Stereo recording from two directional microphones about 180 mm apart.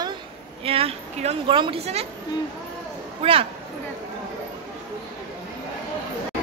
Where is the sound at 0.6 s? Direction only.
30° right (ahead or behind).